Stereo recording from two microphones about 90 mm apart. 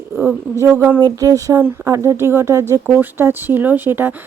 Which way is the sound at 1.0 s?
45° right (ahead or behind).